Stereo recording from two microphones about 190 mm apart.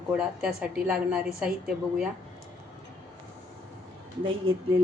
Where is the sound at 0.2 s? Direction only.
5° right (ahead or behind).